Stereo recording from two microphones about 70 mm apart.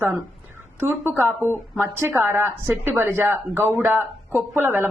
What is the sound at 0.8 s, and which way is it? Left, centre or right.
Speech, right.